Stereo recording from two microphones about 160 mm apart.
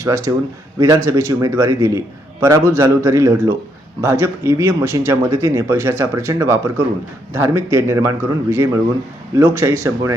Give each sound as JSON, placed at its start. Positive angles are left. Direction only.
{"t": 0.0, "sound": "speech", "side_deg": -20}